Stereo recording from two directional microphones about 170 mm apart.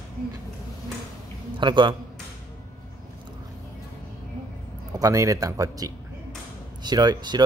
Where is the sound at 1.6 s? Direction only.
30° right (ahead or behind).